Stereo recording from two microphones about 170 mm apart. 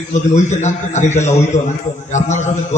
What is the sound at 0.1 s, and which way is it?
A man's voice, 45° left (ahead or behind).